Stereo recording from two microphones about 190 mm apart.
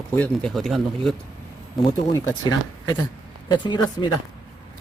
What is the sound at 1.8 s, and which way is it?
Speech, 20° left (ahead or behind).